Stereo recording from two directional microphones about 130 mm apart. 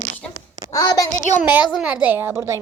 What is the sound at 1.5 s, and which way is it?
A woman's voice, 15° right (ahead or behind).